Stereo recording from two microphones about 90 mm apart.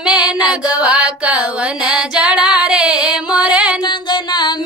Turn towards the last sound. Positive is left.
turn(degrees=55)  # may be behind; listen again after turning